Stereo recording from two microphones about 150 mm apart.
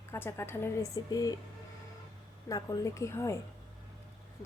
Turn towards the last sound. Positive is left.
turn(degrees=20)  # may be behind; listen again after turning